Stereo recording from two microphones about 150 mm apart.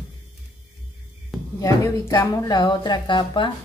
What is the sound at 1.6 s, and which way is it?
A woman's voice, 20° left (ahead or behind).